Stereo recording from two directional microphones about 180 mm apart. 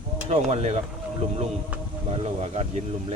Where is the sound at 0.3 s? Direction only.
35° right (ahead or behind).